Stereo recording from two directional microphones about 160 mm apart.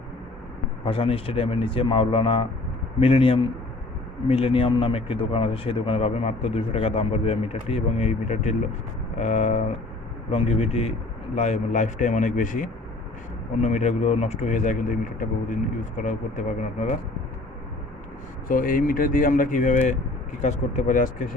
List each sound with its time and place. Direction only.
0.9 s a man's voice: 35° left (ahead or behind)
18.4 s speech: 60° left (ahead or behind)